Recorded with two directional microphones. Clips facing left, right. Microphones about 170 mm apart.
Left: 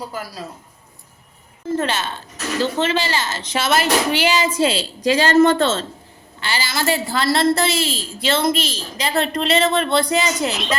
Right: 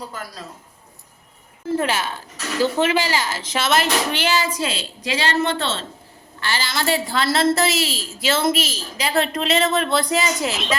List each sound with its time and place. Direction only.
0.1 s a man's voice: 10° left (ahead or behind)
1.7 s a woman's voice: 10° right (ahead or behind); by 4.4 s 15° left (ahead or behind)
4.5 s a woman's voice: 30° left (ahead or behind)
6.4 s a woman's voice: 15° left (ahead or behind)
6.7 s a woman's voice: centre (ahead or behind)